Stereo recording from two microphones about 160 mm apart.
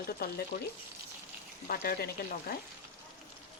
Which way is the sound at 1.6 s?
70° left (ahead or behind).